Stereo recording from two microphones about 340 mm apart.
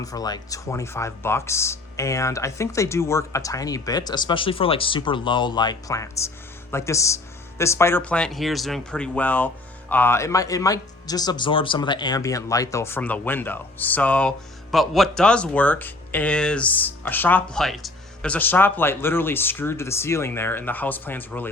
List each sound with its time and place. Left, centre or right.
0.0 s speech: centre